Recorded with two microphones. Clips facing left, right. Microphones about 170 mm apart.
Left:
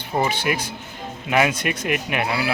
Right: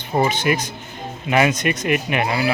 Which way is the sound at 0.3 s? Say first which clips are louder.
Right 3 dB; 10° left (ahead or behind).